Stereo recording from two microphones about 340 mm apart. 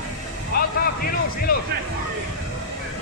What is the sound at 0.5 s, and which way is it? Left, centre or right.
Vehicle, left.